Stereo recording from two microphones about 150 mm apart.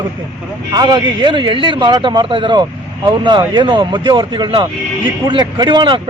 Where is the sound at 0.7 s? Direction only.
30° right (ahead or behind).